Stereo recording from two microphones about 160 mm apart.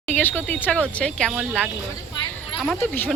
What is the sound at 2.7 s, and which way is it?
Speech, 10° left (ahead or behind).